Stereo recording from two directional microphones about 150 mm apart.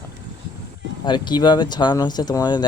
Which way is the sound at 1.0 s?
30° left (ahead or behind).